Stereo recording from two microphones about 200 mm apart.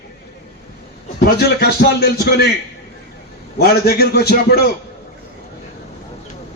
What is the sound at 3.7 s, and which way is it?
A man's voice, 50° left (ahead or behind).